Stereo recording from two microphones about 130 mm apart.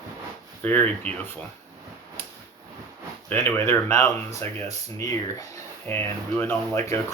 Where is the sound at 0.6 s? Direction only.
15° left (ahead or behind).